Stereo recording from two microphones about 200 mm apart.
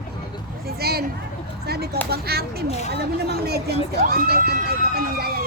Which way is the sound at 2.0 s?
50° right (ahead or behind).